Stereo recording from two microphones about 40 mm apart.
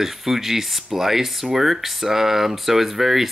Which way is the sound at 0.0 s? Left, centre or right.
Centre.